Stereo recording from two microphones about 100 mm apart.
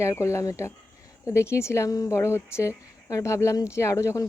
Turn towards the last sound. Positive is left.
turn(degrees=30)  # may be behind; listen again after turning